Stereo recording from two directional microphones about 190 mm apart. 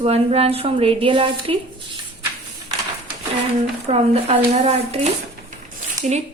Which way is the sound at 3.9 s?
30° right (ahead or behind).